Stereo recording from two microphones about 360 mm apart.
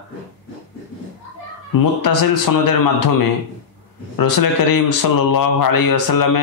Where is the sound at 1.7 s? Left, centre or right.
Left.